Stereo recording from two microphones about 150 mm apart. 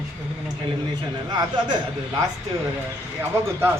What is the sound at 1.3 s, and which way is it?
Speech, 30° right (ahead or behind).